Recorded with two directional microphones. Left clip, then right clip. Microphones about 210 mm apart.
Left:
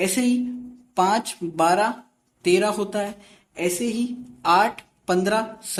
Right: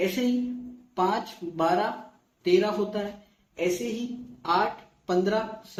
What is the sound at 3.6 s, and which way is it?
Speech, 15° left (ahead or behind).